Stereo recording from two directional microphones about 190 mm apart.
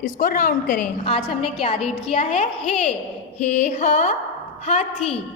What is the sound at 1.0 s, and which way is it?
A woman's voice, 30° left (ahead or behind).